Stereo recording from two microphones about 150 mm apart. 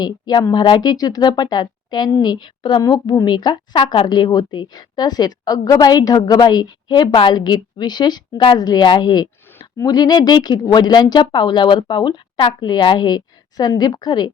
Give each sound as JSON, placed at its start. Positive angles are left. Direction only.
{"t": 0.0, "sound": "a woman's voice", "side_deg": 30}